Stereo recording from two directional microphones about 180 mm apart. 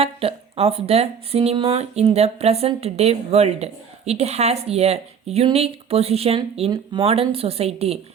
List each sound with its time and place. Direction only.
0.0 s speech: 30° right (ahead or behind)